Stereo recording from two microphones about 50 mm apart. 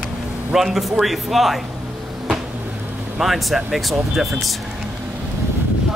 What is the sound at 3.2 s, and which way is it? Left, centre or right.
A man's voice, centre.